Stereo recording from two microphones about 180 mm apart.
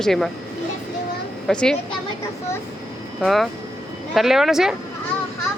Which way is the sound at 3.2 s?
Centre (ahead or behind).